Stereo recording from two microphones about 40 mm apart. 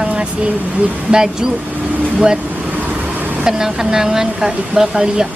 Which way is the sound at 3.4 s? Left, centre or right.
Centre.